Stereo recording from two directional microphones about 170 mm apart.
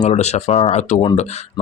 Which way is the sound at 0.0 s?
40° left (ahead or behind).